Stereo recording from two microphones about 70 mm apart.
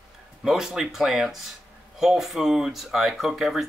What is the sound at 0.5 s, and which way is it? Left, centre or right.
Speech, centre.